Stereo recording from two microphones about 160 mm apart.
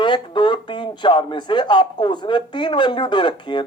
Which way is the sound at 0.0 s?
30° left (ahead or behind).